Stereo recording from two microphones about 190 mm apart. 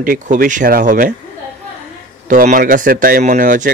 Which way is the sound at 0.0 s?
45° right (ahead or behind).